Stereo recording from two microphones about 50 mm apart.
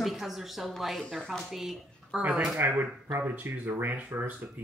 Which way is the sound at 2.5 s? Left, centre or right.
Right.